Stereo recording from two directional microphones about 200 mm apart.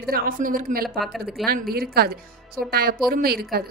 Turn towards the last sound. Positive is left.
turn(degrees=-50)  # may be behind; listen again after turning